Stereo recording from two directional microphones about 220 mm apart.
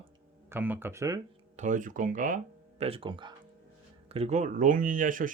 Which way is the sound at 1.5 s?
35° right (ahead or behind).